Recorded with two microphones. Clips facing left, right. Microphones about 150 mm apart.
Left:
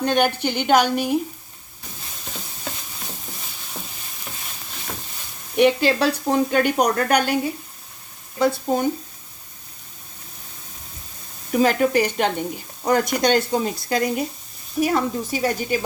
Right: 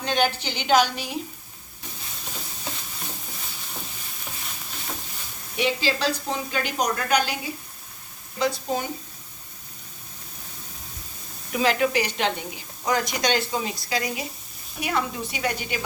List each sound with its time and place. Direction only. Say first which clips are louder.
0.0 s speech: left 5 dB; 55° left (ahead or behind)
5.5 s speech: left 8 dB; 55° left (ahead or behind)
8.4 s speech: left 5 dB; 50° left (ahead or behind)
11.5 s speech: left 5 dB; 45° left (ahead or behind)